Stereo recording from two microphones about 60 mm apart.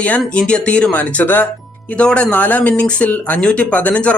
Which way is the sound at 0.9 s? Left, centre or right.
Left.